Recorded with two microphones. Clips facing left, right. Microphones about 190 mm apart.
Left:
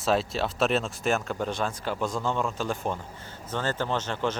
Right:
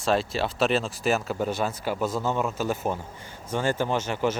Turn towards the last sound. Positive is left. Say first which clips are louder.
# right 3 dB
turn(degrees=-10)  # may be behind; listen again after turning